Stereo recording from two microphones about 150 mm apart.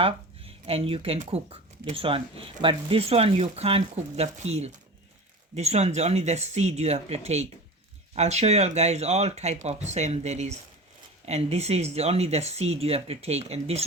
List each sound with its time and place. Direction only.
0.0 s speech: 40° right (ahead or behind)